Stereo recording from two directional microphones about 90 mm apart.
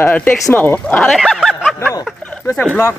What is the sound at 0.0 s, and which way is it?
A man's voice, 20° left (ahead or behind).